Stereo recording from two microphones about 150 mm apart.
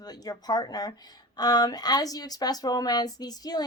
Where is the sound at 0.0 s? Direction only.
25° left (ahead or behind).